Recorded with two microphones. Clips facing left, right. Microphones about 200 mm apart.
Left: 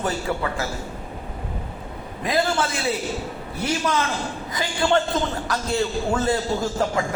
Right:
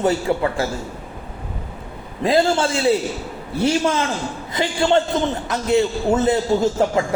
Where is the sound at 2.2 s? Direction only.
30° right (ahead or behind).